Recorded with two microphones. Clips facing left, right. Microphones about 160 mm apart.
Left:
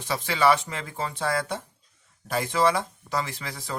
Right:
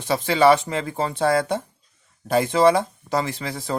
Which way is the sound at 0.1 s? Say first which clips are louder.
Right 6 dB; 25° right (ahead or behind).